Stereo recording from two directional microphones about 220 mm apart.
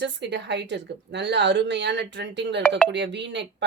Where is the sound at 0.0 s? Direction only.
55° right (ahead or behind).